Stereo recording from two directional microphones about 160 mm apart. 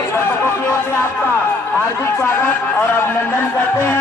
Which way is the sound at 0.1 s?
15° left (ahead or behind).